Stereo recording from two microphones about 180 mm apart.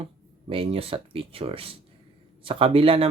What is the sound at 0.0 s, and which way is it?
Speech, 30° right (ahead or behind).